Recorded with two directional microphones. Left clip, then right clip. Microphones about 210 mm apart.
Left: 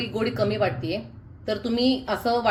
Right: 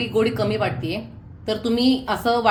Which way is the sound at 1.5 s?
80° right.